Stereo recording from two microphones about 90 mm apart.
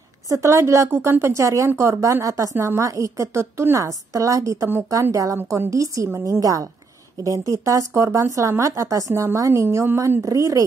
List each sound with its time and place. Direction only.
0.3 s speech: 35° right (ahead or behind)